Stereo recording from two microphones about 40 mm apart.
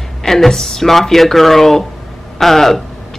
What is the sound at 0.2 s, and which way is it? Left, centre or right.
A woman's voice, centre.